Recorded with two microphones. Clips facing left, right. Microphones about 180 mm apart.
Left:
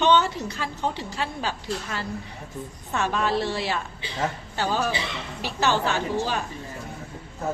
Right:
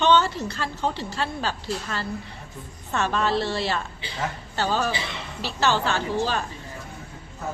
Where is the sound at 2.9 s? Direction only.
10° left (ahead or behind).